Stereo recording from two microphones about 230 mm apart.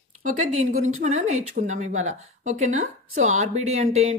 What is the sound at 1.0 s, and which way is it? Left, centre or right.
A woman's voice, right.